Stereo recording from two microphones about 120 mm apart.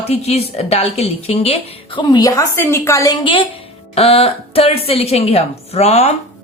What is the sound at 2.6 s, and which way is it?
Speech, 20° left (ahead or behind).